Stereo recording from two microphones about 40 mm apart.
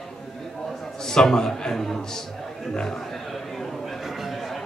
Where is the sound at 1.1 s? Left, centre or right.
Centre.